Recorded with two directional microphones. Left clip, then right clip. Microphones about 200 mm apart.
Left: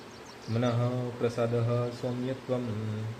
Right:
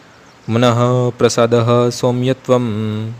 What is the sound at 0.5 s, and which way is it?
A man's voice, 60° right (ahead or behind).